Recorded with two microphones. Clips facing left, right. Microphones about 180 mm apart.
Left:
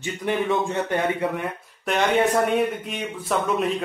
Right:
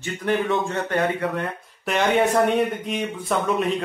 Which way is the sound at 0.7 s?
15° left (ahead or behind).